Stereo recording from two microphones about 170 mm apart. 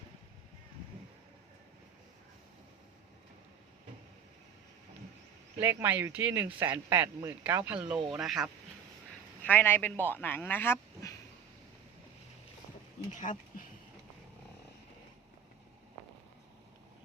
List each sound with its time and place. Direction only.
5.5 s speech: 10° right (ahead or behind)
9.4 s a man's voice: 10° left (ahead or behind)
13.1 s a sound: 45° left (ahead or behind)